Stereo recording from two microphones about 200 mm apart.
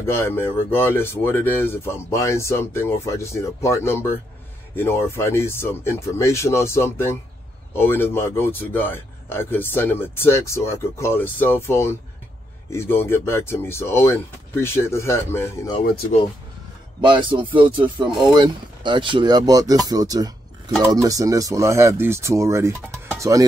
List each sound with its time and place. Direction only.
0.0 s speech: 10° left (ahead or behind)
17.0 s speech: 25° right (ahead or behind)